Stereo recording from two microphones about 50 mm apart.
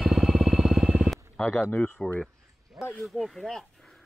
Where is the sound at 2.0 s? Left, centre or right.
Left.